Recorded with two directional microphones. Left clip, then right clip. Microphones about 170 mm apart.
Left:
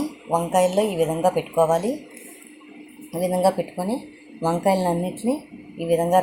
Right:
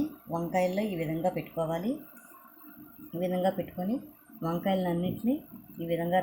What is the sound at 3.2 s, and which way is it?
Speech, 20° left (ahead or behind).